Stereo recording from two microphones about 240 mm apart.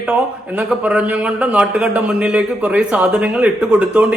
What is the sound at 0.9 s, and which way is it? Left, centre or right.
A man's voice, centre.